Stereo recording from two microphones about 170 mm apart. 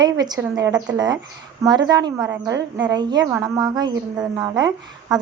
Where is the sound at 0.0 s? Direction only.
25° right (ahead or behind).